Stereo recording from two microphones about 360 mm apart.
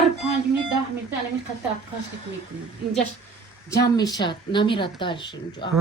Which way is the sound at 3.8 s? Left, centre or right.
Centre.